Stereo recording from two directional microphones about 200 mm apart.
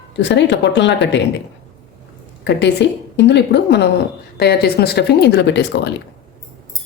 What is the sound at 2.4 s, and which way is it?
A woman's voice, 60° left (ahead or behind).